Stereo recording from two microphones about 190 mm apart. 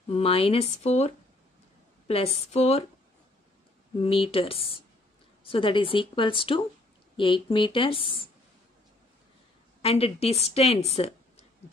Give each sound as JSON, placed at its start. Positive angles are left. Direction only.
{"t": 0.1, "sound": "speech", "side_deg": 30}
{"t": 4.0, "sound": "speech", "side_deg": 30}
{"t": 9.8, "sound": "a woman's voice", "side_deg": 30}